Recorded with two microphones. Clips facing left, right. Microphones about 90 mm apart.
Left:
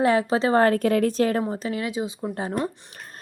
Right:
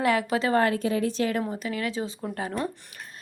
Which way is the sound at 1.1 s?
40° left (ahead or behind).